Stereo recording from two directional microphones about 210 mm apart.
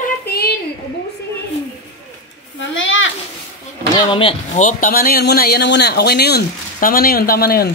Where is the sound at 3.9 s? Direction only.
25° left (ahead or behind).